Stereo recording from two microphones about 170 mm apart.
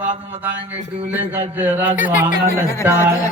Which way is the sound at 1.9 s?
55° left (ahead or behind).